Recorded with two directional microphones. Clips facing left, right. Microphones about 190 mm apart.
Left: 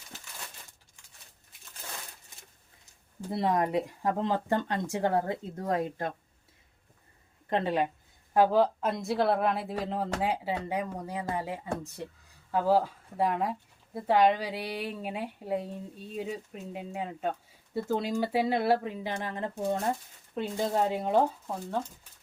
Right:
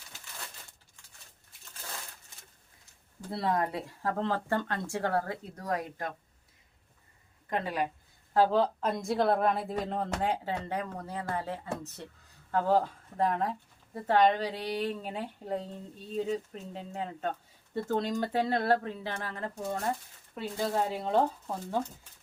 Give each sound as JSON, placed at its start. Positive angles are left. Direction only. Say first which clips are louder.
{"t": 3.2, "sound": "speech", "louder": "left 2 dB", "side_deg": 20}
{"t": 7.5, "sound": "speech", "louder": "left 4 dB", "side_deg": 25}
{"t": 8.3, "sound": "a woman's voice", "louder": "left 2 dB", "side_deg": 10}
{"t": 21.4, "sound": "a woman's voice", "louder": "left 1 dB", "side_deg": 0}